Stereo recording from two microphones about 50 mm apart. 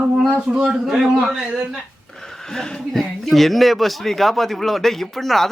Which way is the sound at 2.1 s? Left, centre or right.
Centre.